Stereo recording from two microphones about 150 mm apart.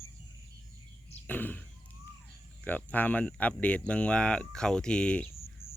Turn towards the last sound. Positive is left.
turn(degrees=40)  # may be behind; listen again after turning